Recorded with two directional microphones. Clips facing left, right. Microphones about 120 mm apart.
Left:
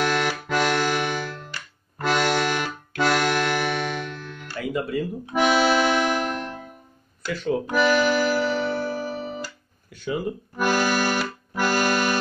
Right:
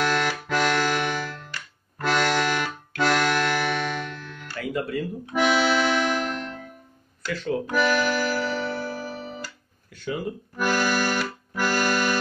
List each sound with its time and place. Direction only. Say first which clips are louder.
0.1 s music: left 1 dB; 15° left (ahead or behind)
10.0 s accordion: left 2 dB; 20° left (ahead or behind)